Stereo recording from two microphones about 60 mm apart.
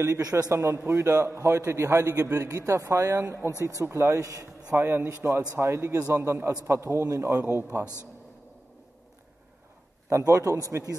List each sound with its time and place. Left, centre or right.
0.0 s a man's voice: right
0.5 s a man's voice: right
2.2 s a man's voice: right
3.8 s a man's voice: right
4.7 s a man's voice: right
10.0 s a man's voice: right